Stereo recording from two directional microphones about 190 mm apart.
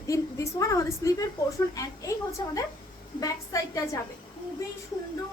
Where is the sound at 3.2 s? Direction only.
20° left (ahead or behind).